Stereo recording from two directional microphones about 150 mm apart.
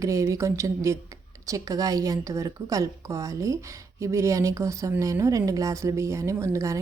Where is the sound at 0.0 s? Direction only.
20° right (ahead or behind).